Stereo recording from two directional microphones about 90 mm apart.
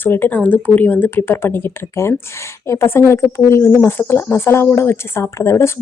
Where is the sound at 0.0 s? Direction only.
25° left (ahead or behind).